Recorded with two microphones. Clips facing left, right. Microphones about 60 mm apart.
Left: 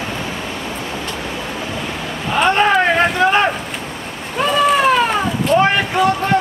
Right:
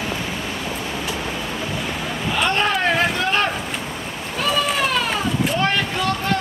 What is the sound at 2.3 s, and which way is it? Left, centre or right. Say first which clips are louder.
Boat: left 7 dB; left.